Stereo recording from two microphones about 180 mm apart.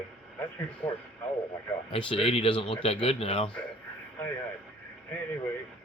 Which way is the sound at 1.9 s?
30° left (ahead or behind).